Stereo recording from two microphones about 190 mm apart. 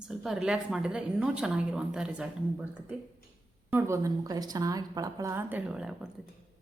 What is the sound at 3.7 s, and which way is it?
A woman's voice, 15° right (ahead or behind).